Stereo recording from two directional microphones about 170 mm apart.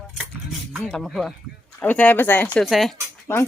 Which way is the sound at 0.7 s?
5° left (ahead or behind).